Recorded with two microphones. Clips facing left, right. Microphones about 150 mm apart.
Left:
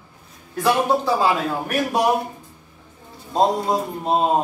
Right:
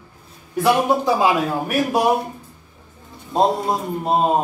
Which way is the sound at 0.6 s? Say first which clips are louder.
Right 2 dB; 15° right (ahead or behind).